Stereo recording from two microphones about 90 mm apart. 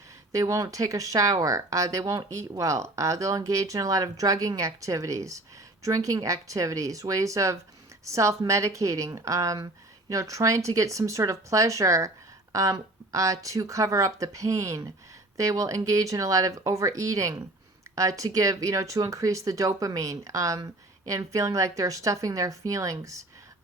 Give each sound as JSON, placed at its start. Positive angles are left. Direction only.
{"t": 0.3, "sound": "speech", "side_deg": -35}